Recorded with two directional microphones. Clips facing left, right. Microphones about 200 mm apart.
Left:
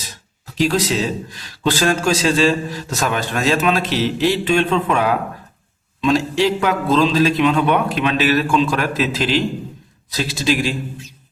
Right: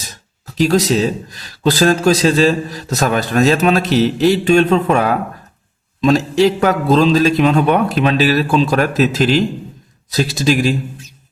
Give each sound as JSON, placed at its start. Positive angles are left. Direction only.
{"t": 0.6, "sound": "a man's voice", "side_deg": -40}